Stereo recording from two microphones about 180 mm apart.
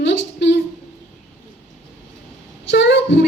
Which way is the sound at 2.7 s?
75° left (ahead or behind).